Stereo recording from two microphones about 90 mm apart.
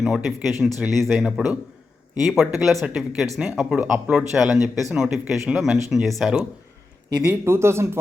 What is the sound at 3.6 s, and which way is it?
Speech, 10° right (ahead or behind).